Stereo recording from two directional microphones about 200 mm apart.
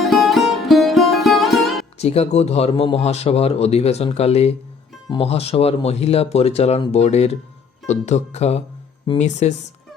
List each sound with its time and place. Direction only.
0.0 s music: centre (ahead or behind)
2.0 s speech: 30° left (ahead or behind)